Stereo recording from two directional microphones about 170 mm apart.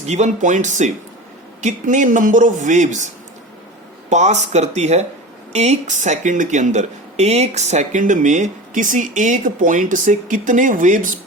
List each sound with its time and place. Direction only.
0.0 s speech: 40° right (ahead or behind)
4.1 s speech: 45° right (ahead or behind)